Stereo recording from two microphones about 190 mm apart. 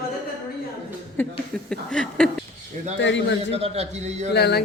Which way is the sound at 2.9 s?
70° left (ahead or behind).